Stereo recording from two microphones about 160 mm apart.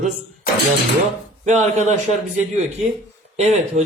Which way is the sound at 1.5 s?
50° right (ahead or behind).